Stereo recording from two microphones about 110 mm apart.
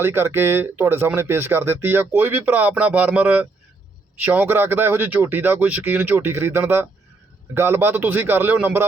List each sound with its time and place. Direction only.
0.0 s speech: 20° right (ahead or behind)